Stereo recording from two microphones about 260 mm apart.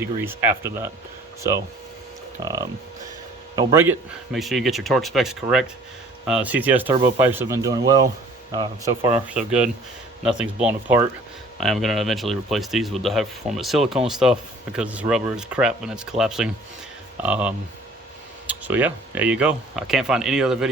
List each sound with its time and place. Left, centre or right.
0.0 s speech: centre
2.4 s speech: centre
9.3 s speech: centre